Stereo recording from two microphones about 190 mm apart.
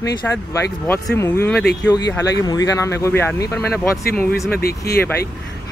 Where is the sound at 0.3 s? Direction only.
10° left (ahead or behind).